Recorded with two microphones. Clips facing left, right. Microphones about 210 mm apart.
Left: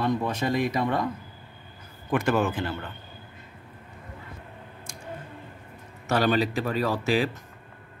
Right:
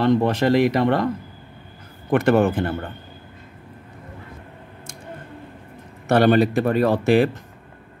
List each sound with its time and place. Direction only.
0.0 s speech: 70° right (ahead or behind)
2.0 s speech: 60° right (ahead or behind)
6.0 s speech: 55° right (ahead or behind)